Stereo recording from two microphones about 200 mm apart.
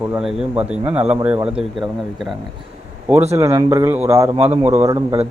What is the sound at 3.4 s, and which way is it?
Speech, 15° right (ahead or behind).